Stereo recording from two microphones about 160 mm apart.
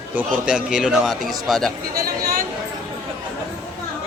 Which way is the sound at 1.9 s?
70° right (ahead or behind).